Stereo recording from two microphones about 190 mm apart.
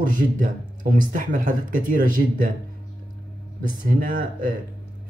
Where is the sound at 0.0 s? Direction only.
45° right (ahead or behind).